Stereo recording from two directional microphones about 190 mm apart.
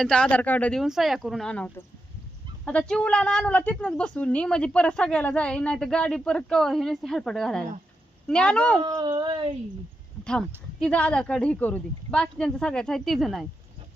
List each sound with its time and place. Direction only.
0.0 s a woman's voice: 5° left (ahead or behind)
8.8 s speech: 25° right (ahead or behind)
10.2 s a woman's voice: 5° left (ahead or behind)